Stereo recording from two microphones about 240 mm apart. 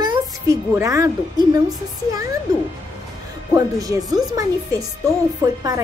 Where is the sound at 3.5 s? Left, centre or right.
Centre.